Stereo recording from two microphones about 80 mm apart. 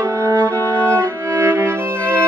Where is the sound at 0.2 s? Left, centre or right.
Right.